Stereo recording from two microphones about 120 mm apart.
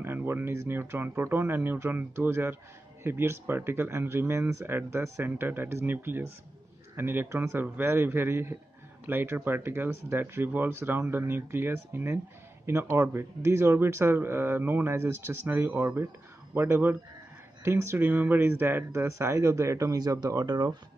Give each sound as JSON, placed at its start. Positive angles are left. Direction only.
{"t": 0.0, "sound": "speech", "side_deg": -20}